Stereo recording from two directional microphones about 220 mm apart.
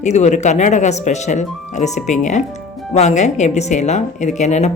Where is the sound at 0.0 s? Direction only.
30° left (ahead or behind).